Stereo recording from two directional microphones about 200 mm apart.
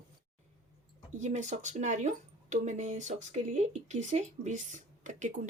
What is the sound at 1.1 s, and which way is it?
Speech, 35° right (ahead or behind).